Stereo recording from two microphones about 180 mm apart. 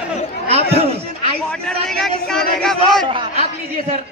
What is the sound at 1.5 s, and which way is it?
Speech, 5° left (ahead or behind).